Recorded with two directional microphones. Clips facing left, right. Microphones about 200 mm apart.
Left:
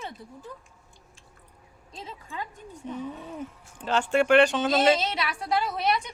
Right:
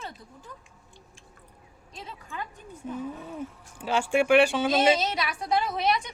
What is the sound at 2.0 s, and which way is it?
Speech, 25° left (ahead or behind).